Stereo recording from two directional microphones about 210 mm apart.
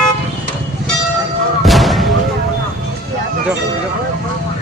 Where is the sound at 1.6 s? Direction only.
Centre (ahead or behind).